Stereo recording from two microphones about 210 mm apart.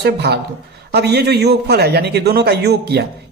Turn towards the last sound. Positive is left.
turn(degrees=-50)  # may be behind; listen again after turning